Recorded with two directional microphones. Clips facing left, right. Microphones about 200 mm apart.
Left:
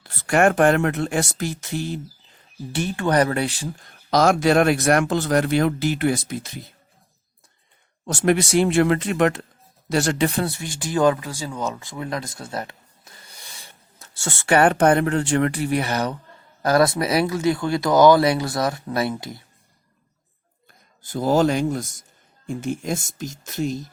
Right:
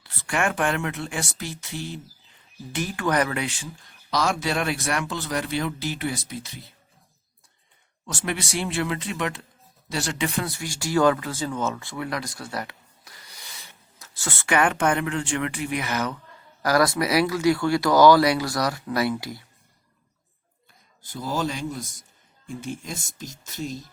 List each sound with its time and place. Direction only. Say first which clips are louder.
0.0 s speech: left 8 dB; 45° left (ahead or behind)
2.7 s speech: left 4 dB; 30° left (ahead or behind); by 6.6 s 50° left (ahead or behind)
8.0 s speech: left 10 dB; 45° left (ahead or behind); by 19.4 s 25° left (ahead or behind)
20.7 s speech: left 8 dB; 50° left (ahead or behind); by 21.8 s 65° left (ahead or behind)
22.6 s speech: left 9 dB; 50° left (ahead or behind)